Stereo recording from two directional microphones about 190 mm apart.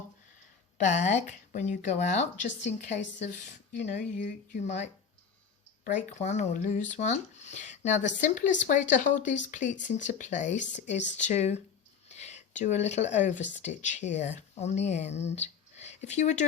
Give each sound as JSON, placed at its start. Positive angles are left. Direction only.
{"t": 0.8, "sound": "speech", "side_deg": 40}
{"t": 2.9, "sound": "speech", "side_deg": 70}
{"t": 4.1, "sound": "speech", "side_deg": 40}
{"t": 5.8, "sound": "speech", "side_deg": 40}